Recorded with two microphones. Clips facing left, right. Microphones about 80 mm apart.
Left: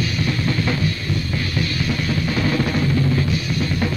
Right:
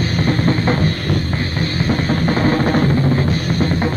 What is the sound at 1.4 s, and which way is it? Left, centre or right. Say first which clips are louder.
Music: right 3 dB; right.